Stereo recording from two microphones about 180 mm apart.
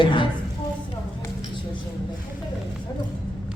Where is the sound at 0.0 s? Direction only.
25° left (ahead or behind).